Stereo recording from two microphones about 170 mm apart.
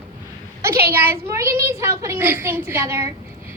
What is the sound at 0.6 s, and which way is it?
A woman's voice, 15° right (ahead or behind).